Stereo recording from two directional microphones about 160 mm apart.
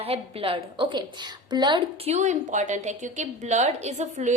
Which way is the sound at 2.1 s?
45° right (ahead or behind).